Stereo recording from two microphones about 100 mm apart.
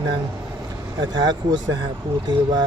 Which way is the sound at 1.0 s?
45° right (ahead or behind).